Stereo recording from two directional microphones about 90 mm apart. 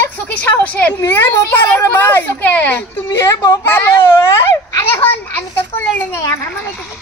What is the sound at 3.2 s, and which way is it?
Speech, 45° left (ahead or behind).